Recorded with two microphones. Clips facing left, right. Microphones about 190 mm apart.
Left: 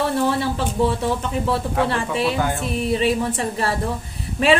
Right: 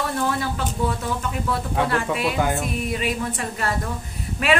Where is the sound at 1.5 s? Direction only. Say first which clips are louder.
Left 1 dB; 30° left (ahead or behind).